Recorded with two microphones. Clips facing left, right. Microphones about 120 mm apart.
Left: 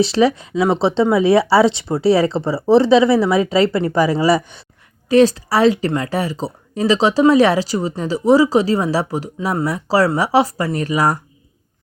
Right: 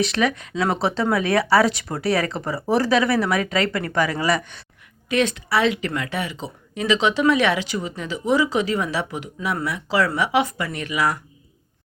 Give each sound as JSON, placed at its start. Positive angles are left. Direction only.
{"t": 0.0, "sound": "speech", "side_deg": 30}